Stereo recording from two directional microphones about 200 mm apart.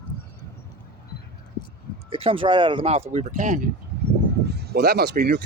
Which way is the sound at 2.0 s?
30° right (ahead or behind).